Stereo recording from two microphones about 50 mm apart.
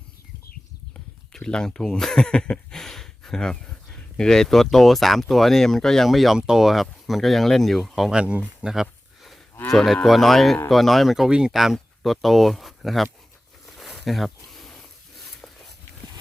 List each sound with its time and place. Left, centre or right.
1.5 s speech: centre
2.7 s speech: centre
8.1 s speech: right
8.6 s speech: centre
10.1 s speech: centre
11.3 s speech: centre
11.5 s speech: centre
13.7 s a sound: centre